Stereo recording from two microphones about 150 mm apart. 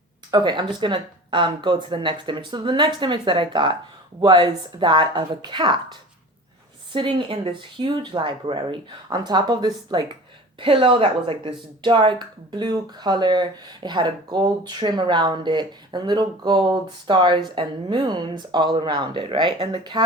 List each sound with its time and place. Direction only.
0.3 s speech: 30° right (ahead or behind)